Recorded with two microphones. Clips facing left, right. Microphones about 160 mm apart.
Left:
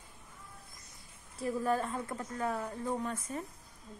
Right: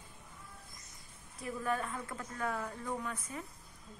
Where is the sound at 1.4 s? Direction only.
30° left (ahead or behind).